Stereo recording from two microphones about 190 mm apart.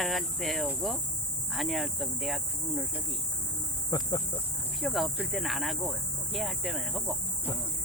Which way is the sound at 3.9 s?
20° left (ahead or behind).